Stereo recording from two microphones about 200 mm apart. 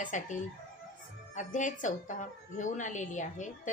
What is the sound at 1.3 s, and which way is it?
A woman's voice, 40° left (ahead or behind).